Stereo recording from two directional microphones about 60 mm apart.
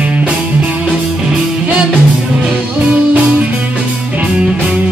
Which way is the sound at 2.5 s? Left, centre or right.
Right.